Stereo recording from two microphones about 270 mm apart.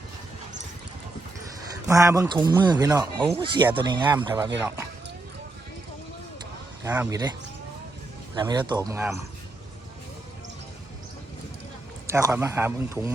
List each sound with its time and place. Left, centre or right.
1.9 s speech: centre
6.8 s speech: centre
8.4 s speech: centre
12.0 s speech: centre